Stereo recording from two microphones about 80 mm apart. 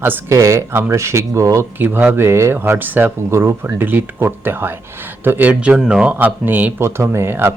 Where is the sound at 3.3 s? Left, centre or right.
Right; by 6.2 s centre.